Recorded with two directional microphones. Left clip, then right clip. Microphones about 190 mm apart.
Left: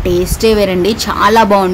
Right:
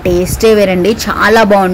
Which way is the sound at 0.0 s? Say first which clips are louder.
Right 2 dB; 15° right (ahead or behind).